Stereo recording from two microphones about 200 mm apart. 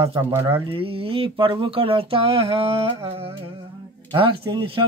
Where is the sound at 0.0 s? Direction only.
30° right (ahead or behind).